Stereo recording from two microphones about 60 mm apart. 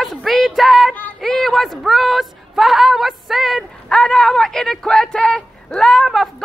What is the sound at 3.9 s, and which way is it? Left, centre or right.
Speech, centre.